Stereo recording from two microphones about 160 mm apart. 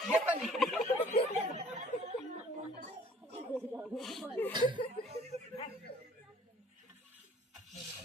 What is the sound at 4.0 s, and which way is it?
Snake, centre (ahead or behind).